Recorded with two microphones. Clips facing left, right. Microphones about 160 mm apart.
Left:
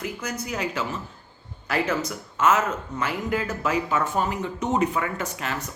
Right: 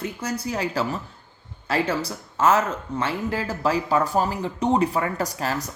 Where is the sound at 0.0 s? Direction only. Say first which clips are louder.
Right 3 dB; 30° right (ahead or behind).